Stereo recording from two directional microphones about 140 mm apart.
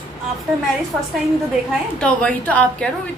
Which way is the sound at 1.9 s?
10° left (ahead or behind).